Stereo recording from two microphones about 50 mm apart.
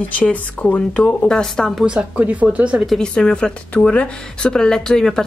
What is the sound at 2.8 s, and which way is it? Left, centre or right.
Speech, centre.